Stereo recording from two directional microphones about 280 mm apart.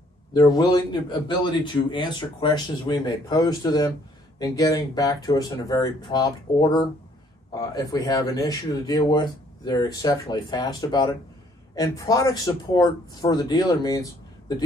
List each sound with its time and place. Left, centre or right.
0.3 s a man's voice: centre